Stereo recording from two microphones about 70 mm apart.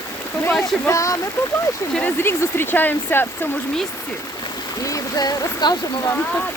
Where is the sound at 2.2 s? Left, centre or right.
Left.